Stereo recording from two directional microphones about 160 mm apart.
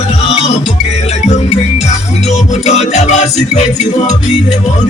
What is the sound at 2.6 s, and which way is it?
Music, 45° left (ahead or behind).